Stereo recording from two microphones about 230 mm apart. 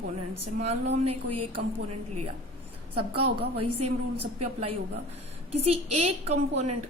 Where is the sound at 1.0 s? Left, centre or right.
Right.